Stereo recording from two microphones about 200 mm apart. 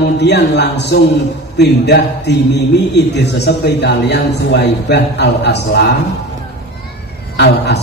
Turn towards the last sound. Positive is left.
turn(degrees=55)  # may be behind; listen again after turning